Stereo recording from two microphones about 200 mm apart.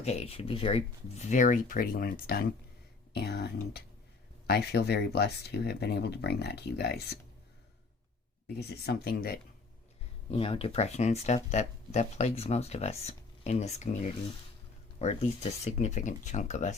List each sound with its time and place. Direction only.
0.0 s speech: 30° left (ahead or behind); by 7.2 s 55° left (ahead or behind)
8.5 s speech: 55° left (ahead or behind)
10.3 s speech: 25° left (ahead or behind)